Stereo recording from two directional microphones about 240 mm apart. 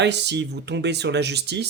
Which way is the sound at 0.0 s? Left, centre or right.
Right.